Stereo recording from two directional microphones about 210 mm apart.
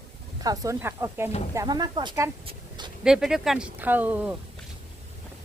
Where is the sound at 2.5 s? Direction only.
20° right (ahead or behind).